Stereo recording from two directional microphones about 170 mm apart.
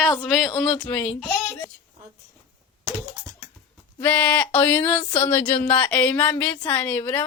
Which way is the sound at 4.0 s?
10° left (ahead or behind).